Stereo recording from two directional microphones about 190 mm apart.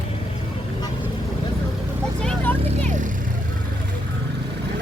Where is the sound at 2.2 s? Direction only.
10° left (ahead or behind).